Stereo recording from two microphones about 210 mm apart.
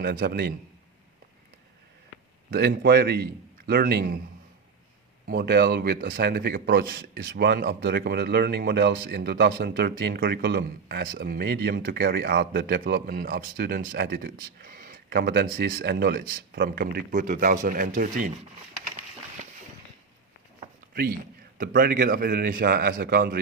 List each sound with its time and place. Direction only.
0.0 s speech: 45° right (ahead or behind)
2.5 s speech: 50° right (ahead or behind)
5.2 s speech: 45° right (ahead or behind)
21.6 s speech: 40° right (ahead or behind)